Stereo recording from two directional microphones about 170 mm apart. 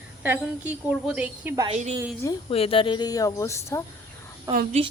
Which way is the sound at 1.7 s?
40° right (ahead or behind).